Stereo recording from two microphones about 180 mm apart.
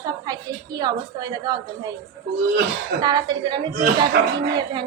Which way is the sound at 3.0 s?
25° right (ahead or behind).